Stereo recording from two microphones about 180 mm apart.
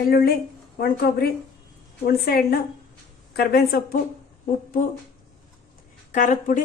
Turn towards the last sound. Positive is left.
turn(degrees=45)  # may be behind; listen again after turning